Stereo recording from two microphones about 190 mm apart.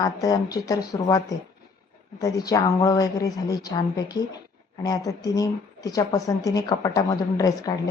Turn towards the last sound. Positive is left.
turn(degrees=20)  # may be behind; listen again after turning